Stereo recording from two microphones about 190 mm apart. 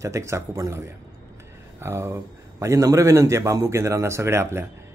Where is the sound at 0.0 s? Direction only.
15° right (ahead or behind).